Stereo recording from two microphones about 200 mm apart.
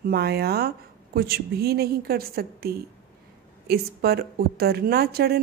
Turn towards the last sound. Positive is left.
turn(degrees=-50)  # may be behind; listen again after turning